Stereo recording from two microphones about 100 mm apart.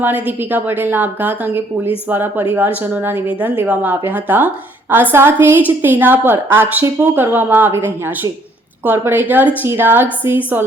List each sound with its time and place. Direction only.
0.0 s a woman's voice: 15° right (ahead or behind)